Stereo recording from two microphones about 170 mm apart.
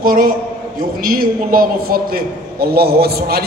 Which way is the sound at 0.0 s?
55° right (ahead or behind).